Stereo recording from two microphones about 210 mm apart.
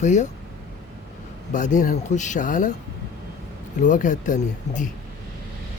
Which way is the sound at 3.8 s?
35° left (ahead or behind).